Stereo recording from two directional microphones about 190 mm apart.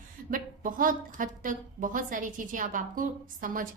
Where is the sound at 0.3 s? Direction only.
45° right (ahead or behind).